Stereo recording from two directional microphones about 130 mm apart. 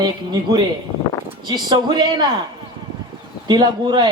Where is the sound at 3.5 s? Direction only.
35° right (ahead or behind).